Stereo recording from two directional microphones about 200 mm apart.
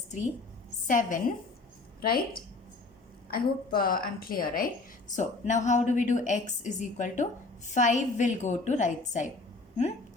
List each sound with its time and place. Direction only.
0.9 s a woman's voice: 40° left (ahead or behind)
3.2 s a woman's voice: 50° left (ahead or behind)